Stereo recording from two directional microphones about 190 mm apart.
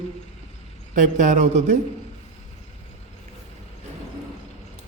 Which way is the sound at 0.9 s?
40° right (ahead or behind).